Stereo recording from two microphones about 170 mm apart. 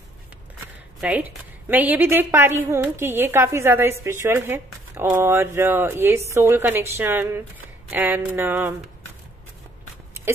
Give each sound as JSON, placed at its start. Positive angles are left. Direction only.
{"t": 1.0, "sound": "a woman's voice", "side_deg": -10}